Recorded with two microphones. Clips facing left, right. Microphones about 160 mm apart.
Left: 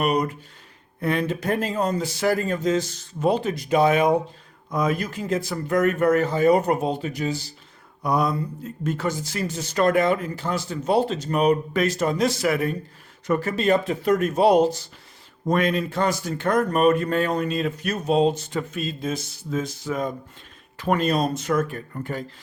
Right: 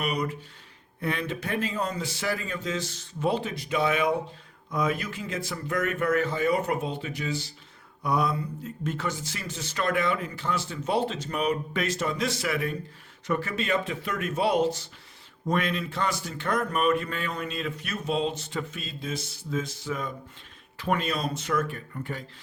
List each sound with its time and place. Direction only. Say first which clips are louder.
0.0 s speech: left 7 dB; 45° left (ahead or behind)